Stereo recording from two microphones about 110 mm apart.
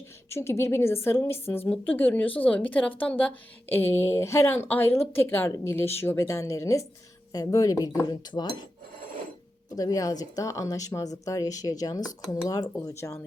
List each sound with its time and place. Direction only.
0.3 s a woman's voice: 25° left (ahead or behind); by 8.5 s 40° left (ahead or behind)
9.6 s a woman's voice: 30° left (ahead or behind)